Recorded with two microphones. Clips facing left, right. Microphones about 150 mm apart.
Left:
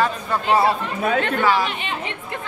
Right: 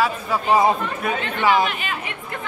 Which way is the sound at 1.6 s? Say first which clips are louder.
Right 1 dB; 25° left (ahead or behind).